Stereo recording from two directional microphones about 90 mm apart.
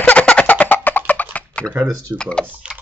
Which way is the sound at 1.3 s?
15° left (ahead or behind).